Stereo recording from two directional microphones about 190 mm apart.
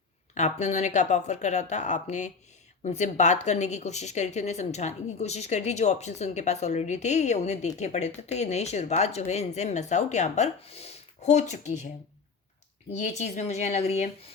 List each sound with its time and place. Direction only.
0.3 s speech: 40° left (ahead or behind)
12.9 s speech: 40° left (ahead or behind)